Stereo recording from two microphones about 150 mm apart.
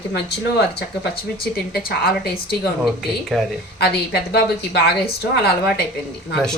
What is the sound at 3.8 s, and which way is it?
Speech, 90° left.